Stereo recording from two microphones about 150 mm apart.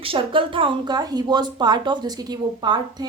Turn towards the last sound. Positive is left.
turn(degrees=-30)  # may be behind; listen again after turning